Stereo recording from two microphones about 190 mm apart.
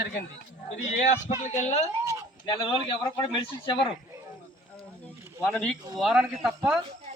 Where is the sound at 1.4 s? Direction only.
40° left (ahead or behind).